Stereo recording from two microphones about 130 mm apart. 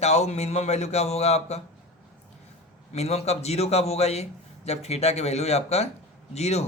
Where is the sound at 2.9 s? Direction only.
55° left (ahead or behind).